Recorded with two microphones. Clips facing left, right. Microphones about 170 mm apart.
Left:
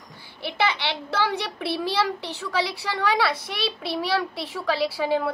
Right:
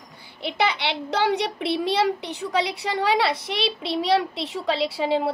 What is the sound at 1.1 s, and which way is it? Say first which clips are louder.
Speech: right 4 dB; 20° right (ahead or behind).